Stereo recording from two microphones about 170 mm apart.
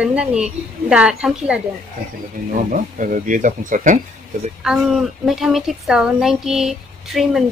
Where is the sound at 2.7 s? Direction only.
50° right (ahead or behind).